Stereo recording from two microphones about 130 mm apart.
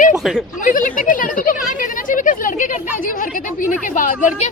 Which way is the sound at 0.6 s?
90° left.